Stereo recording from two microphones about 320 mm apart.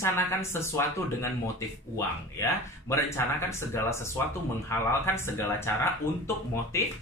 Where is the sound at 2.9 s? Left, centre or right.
Centre.